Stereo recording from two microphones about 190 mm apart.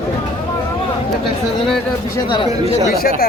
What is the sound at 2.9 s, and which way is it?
Speech, 50° left (ahead or behind).